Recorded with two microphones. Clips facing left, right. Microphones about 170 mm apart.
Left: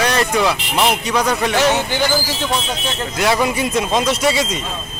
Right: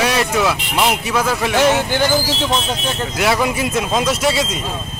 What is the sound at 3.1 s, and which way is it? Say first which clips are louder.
Speech: left 1 dB; centre (ahead or behind).